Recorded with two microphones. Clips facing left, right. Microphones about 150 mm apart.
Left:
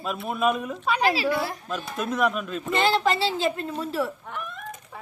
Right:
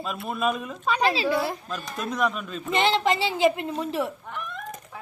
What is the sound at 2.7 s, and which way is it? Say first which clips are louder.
Speech: even; 20° right (ahead or behind).